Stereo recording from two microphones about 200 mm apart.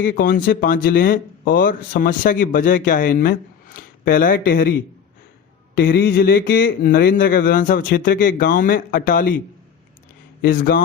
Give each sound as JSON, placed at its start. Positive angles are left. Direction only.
{"t": 0.0, "sound": "speech", "side_deg": 45}
{"t": 5.7, "sound": "speech", "side_deg": 50}
{"t": 10.4, "sound": "speech", "side_deg": 45}